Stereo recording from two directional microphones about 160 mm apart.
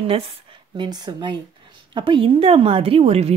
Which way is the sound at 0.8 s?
25° right (ahead or behind).